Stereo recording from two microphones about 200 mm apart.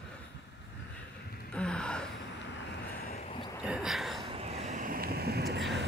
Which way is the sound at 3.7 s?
Centre (ahead or behind).